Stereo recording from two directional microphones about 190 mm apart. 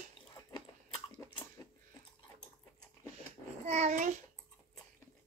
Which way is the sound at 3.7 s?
35° right (ahead or behind).